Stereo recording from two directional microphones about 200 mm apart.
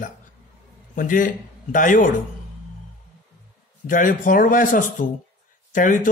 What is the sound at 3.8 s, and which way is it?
Speech, 40° left (ahead or behind).